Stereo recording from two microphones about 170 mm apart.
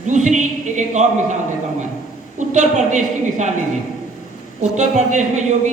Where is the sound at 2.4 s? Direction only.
45° right (ahead or behind).